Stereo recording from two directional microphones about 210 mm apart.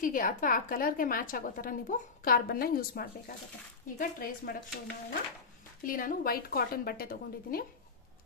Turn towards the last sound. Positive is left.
turn(degrees=45)  # may be behind; listen again after turning